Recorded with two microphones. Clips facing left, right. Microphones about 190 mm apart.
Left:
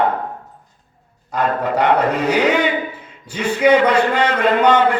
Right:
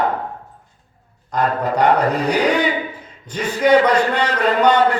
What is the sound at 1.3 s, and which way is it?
Speech, 40° right (ahead or behind).